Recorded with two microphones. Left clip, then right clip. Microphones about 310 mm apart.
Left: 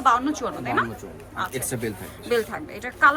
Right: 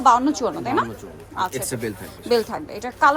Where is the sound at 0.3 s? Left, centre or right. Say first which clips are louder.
Right 4 dB; centre.